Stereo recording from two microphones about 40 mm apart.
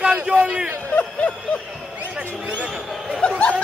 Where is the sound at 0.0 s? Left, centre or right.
Right.